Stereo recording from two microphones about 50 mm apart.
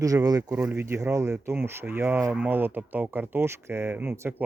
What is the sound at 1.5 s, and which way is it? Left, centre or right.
Speech, right.